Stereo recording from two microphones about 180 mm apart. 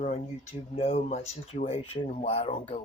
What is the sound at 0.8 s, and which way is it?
Speech, 35° left (ahead or behind).